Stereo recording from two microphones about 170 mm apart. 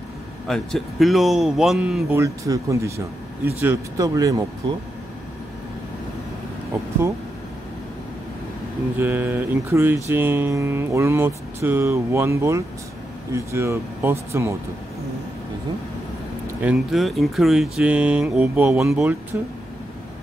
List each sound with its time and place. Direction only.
0.5 s speech: centre (ahead or behind)
2.0 s speech: 15° right (ahead or behind)
8.9 s speech: 15° right (ahead or behind)
16.4 s speech: 5° right (ahead or behind)